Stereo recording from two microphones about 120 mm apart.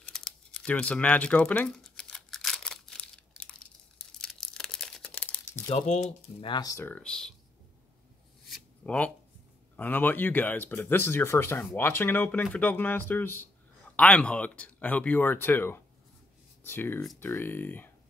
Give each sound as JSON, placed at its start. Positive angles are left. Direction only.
{"t": 0.0, "sound": "crumpling", "side_deg": 5}
{"t": 5.7, "sound": "speech", "side_deg": 60}
{"t": 6.6, "sound": "speech", "side_deg": 25}
{"t": 6.9, "sound": "speech", "side_deg": 5}
{"t": 8.8, "sound": "speech", "side_deg": 10}